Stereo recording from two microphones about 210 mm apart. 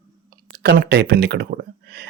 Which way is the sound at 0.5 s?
50° right (ahead or behind).